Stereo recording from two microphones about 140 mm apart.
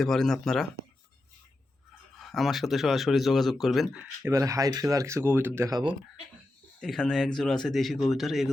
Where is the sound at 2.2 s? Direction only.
Centre (ahead or behind).